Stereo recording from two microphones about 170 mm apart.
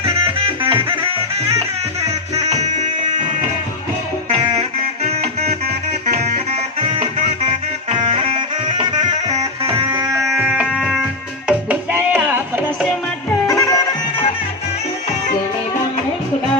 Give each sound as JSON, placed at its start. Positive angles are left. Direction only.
{"t": 0.0, "sound": "music", "side_deg": -30}
{"t": 2.5, "sound": "music", "side_deg": -45}
{"t": 4.3, "sound": "music", "side_deg": -35}
{"t": 10.3, "sound": "music", "side_deg": -5}
{"t": 13.5, "sound": "music", "side_deg": 20}